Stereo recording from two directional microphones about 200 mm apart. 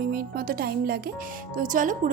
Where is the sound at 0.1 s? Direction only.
50° right (ahead or behind).